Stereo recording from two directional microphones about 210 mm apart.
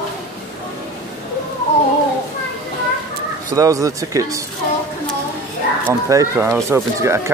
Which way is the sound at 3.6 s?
15° right (ahead or behind).